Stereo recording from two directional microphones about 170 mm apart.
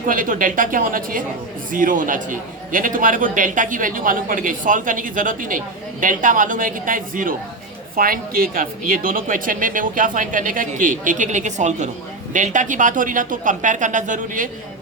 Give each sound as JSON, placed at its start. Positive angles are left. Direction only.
{"t": 0.1, "sound": "a man's voice", "side_deg": -55}